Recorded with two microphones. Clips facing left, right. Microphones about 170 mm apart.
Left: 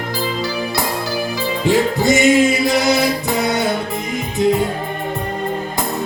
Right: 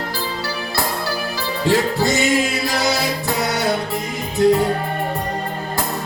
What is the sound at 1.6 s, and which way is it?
Music, 15° left (ahead or behind).